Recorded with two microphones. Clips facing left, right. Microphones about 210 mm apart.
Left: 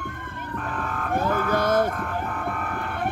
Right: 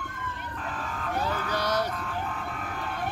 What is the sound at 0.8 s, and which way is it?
Vehicle, 55° left (ahead or behind).